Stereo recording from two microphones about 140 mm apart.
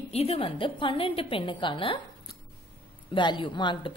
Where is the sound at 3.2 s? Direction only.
35° left (ahead or behind).